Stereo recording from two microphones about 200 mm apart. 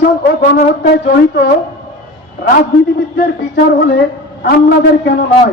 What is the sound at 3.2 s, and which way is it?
A man's voice, 55° left (ahead or behind).